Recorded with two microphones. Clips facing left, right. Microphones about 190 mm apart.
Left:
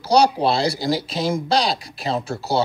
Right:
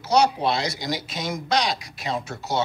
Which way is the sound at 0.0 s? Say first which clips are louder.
Left 4 dB; 35° left (ahead or behind).